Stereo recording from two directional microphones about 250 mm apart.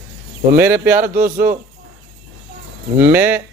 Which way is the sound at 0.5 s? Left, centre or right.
Centre.